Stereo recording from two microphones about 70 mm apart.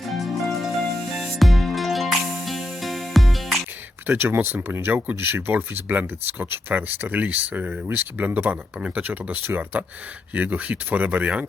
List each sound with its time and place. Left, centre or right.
0.1 s music: centre
4.0 s speech: right